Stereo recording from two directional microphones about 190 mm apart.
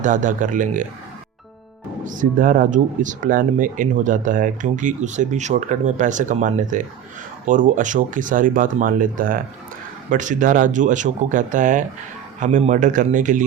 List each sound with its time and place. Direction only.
0.0 s speech: 40° right (ahead or behind)
2.0 s speech: 45° right (ahead or behind)